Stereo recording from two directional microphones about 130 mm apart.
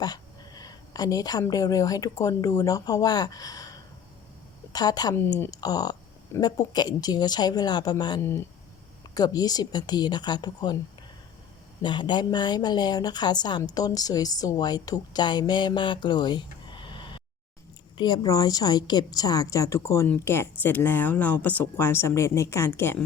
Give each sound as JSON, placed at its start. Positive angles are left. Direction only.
{"t": 0.0, "sound": "a woman's voice", "side_deg": 30}
{"t": 5.1, "sound": "speech", "side_deg": 20}
{"t": 5.5, "sound": "speech", "side_deg": 30}
{"t": 11.8, "sound": "a woman's voice", "side_deg": 35}